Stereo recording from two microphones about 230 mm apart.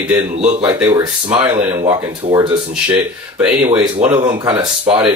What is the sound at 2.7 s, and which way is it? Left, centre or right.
Speech, centre.